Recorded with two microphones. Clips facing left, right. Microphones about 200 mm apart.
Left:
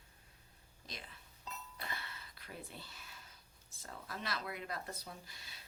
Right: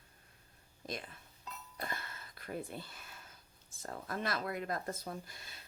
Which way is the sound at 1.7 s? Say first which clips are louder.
Right 7 dB; 45° right (ahead or behind).